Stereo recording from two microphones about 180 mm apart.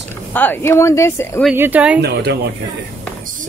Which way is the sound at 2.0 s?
70° right (ahead or behind).